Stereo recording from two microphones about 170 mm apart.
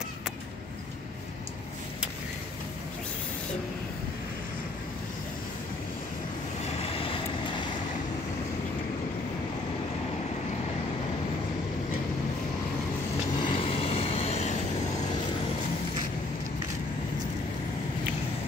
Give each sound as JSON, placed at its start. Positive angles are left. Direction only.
{"t": 6.6, "sound": "vehicle", "side_deg": 35}
{"t": 13.4, "sound": "vehicle", "side_deg": 30}